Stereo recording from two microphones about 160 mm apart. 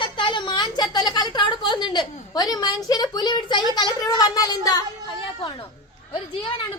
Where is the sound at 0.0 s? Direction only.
30° left (ahead or behind).